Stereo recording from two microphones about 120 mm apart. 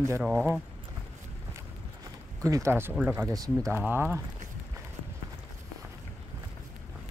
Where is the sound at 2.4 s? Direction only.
25° right (ahead or behind).